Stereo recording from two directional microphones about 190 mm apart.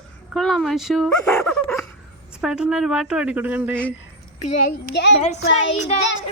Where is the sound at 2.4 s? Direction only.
5° right (ahead or behind).